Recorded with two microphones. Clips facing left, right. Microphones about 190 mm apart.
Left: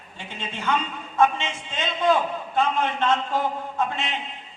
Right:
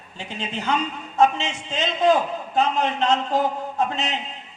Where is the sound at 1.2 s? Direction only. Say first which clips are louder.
Right 2 dB; 40° right (ahead or behind).